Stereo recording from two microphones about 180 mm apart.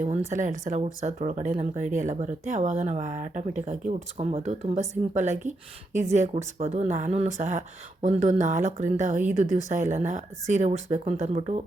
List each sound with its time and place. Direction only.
0.3 s speech: 45° right (ahead or behind)